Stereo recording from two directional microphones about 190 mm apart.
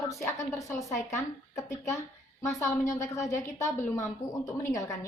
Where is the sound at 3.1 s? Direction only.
15° left (ahead or behind).